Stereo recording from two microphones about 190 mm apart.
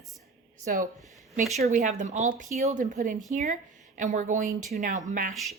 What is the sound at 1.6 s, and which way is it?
A woman's voice, 40° right (ahead or behind).